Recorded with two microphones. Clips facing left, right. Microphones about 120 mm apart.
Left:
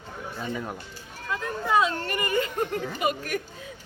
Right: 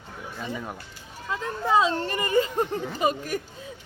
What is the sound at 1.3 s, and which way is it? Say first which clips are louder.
Speech: right 1 dB; 25° right (ahead or behind).